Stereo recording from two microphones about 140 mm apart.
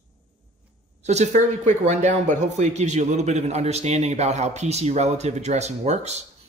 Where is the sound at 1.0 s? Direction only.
55° right (ahead or behind).